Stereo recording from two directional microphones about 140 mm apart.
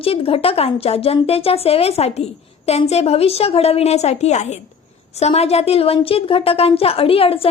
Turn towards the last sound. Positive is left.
turn(degrees=45)  # may be behind; listen again after turning